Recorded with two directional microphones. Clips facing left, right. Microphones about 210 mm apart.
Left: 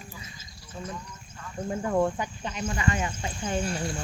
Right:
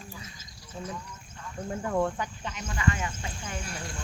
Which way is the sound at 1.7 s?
5° left (ahead or behind).